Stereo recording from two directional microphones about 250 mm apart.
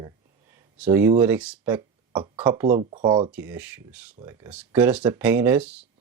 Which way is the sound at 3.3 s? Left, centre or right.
Centre.